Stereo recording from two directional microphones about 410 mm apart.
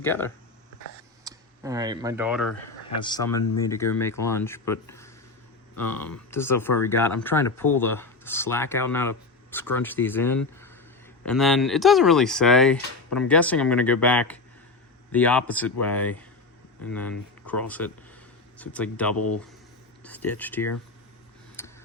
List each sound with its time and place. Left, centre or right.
0.0 s speech: centre
1.2 s speech: centre
3.0 s speech: centre
19.1 s speech: left
20.0 s speech: centre
21.6 s tick-tock: centre